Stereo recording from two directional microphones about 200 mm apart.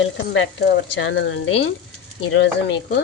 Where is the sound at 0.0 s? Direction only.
70° left (ahead or behind).